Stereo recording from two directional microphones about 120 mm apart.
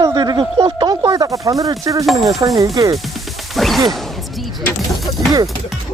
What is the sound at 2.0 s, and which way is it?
Speech, centre (ahead or behind).